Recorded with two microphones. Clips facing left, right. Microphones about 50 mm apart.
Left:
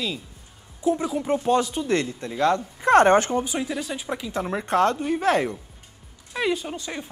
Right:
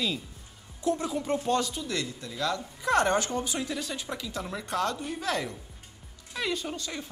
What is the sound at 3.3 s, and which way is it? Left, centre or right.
Speech, centre.